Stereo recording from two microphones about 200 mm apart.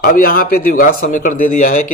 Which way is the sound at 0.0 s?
45° left (ahead or behind).